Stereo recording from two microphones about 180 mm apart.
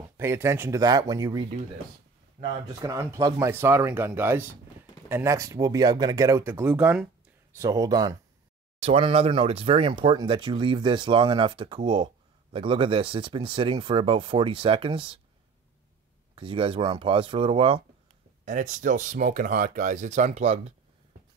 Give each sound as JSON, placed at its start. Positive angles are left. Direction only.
{"t": 0.2, "sound": "speech", "side_deg": -15}
{"t": 2.4, "sound": "speech", "side_deg": -45}
{"t": 2.8, "sound": "speech", "side_deg": -15}
{"t": 7.5, "sound": "speech", "side_deg": -20}
{"t": 8.8, "sound": "speech", "side_deg": -35}
{"t": 16.3, "sound": "speech", "side_deg": -30}
{"t": 18.4, "sound": "speech", "side_deg": -45}